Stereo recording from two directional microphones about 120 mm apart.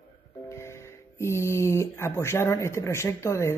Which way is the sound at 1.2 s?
20° left (ahead or behind).